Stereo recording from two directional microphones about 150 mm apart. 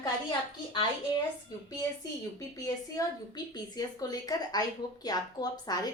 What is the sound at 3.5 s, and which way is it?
A woman's voice, 25° left (ahead or behind).